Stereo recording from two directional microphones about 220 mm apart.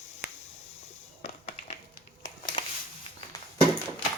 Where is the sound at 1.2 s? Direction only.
35° left (ahead or behind).